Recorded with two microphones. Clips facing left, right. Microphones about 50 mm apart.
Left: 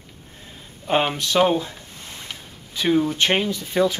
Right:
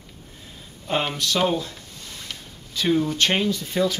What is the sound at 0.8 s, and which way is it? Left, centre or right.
Speech, left.